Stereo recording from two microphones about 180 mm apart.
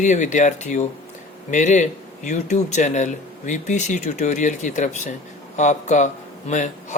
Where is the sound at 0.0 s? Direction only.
40° left (ahead or behind).